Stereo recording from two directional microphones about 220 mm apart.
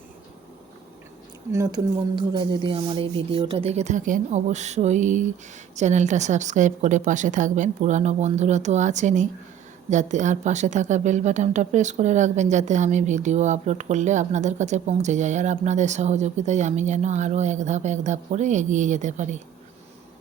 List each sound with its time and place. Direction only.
1.5 s speech: 15° right (ahead or behind); by 19.4 s 35° right (ahead or behind)